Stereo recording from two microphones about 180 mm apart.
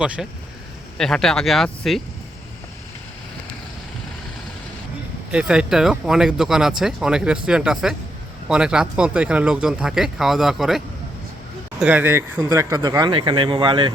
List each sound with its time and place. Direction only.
0.2 s speech: centre (ahead or behind)
5.3 s speech: 5° right (ahead or behind); by 13.9 s 25° right (ahead or behind)